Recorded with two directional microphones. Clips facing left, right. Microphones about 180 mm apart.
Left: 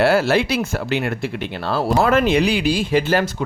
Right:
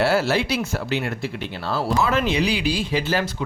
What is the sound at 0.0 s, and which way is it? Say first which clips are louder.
Speech: left 4 dB; 55° left (ahead or behind).